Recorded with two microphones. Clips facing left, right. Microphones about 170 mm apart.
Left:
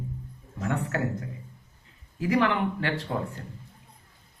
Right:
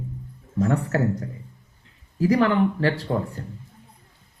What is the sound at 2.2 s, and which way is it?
Speech, 35° right (ahead or behind).